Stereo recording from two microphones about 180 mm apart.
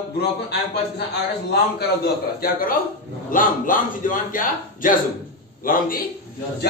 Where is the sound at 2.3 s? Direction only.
55° left (ahead or behind).